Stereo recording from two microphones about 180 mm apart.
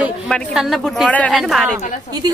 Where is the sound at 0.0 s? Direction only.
Centre (ahead or behind).